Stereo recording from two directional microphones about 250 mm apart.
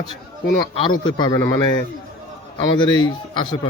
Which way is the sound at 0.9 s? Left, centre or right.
Centre.